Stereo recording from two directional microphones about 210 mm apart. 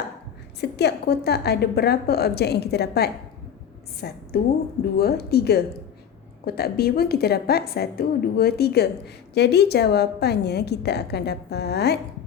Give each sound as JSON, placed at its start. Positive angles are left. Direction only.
{"t": 0.6, "sound": "a woman's voice", "side_deg": 50}